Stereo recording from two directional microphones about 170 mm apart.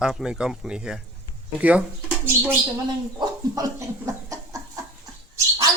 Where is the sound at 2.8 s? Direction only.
25° right (ahead or behind).